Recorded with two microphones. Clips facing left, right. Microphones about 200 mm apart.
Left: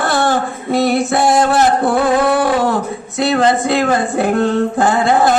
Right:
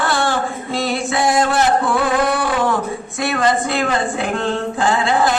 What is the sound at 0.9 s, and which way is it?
Music, 60° left (ahead or behind).